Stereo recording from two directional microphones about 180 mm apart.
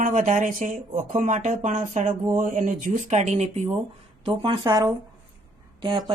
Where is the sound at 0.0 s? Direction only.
45° right (ahead or behind).